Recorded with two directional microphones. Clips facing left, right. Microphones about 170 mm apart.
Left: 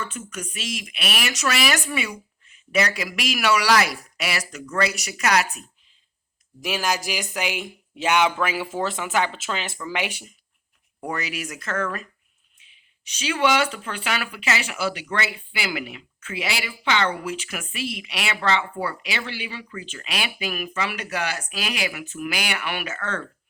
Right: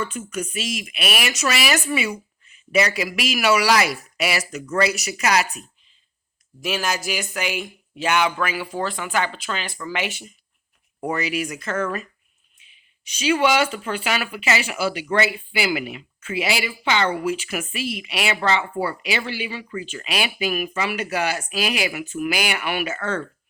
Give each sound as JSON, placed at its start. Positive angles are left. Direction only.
{"t": 0.0, "sound": "speech", "side_deg": -10}
{"t": 6.6, "sound": "speech", "side_deg": 15}
{"t": 11.0, "sound": "speech", "side_deg": 0}
{"t": 13.1, "sound": "speech", "side_deg": -10}